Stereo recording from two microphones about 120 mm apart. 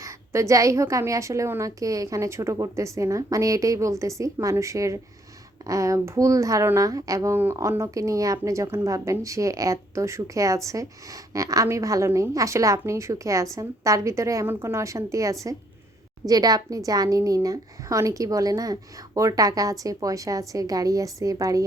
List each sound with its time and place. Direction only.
0.0 s a woman's voice: 25° right (ahead or behind)